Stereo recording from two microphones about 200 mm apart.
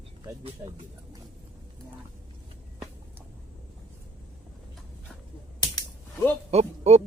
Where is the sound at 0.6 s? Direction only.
20° right (ahead or behind).